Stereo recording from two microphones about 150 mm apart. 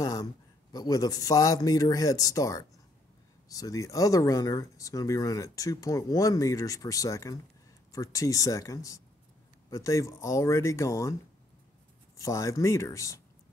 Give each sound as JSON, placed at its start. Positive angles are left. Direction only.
{"t": 0.0, "sound": "a man's voice", "side_deg": 25}
{"t": 12.2, "sound": "speech", "side_deg": 20}